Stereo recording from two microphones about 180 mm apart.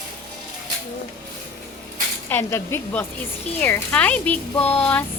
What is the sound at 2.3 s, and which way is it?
Speech, 10° left (ahead or behind).